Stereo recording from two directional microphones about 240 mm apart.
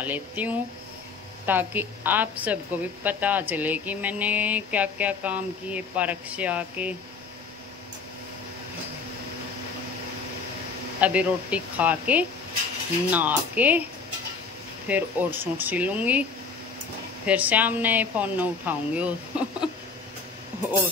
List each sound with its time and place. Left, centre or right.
0.0 s a woman's voice: centre
11.0 s a woman's voice: centre
14.9 s a woman's voice: centre
17.3 s a woman's voice: centre